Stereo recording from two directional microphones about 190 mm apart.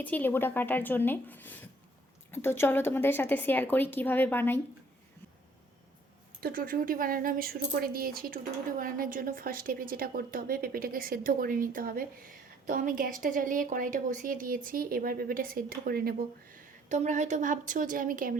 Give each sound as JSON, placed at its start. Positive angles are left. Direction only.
{"t": 0.0, "sound": "speech", "side_deg": 10}
{"t": 6.4, "sound": "a woman's voice", "side_deg": -50}